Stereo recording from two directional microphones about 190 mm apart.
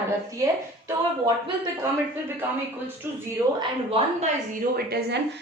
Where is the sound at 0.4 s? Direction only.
20° right (ahead or behind).